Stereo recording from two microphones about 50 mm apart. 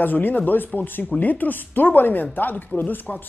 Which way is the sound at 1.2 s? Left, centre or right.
Left.